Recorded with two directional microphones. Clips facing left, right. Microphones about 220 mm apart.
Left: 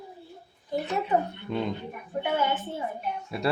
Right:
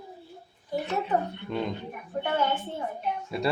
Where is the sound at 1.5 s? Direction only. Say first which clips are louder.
Left 1 dB; 5° left (ahead or behind).